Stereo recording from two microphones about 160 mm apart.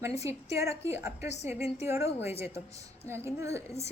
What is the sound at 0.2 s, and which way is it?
A woman's voice, 20° right (ahead or behind).